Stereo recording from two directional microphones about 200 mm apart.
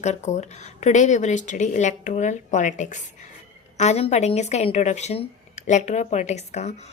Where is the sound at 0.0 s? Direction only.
35° left (ahead or behind).